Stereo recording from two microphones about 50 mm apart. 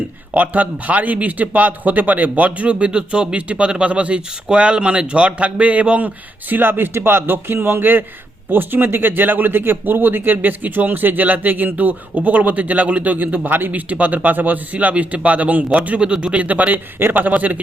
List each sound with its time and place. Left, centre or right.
0.3 s a man's voice: right
6.5 s speech: right